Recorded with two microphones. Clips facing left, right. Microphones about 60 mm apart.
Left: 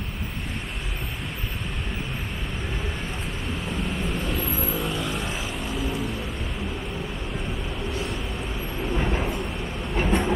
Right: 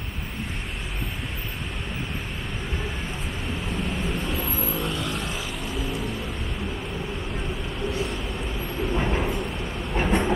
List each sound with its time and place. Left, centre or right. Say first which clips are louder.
3.7 s vehicle: even; centre
8.8 s vehicle: right 1 dB; centre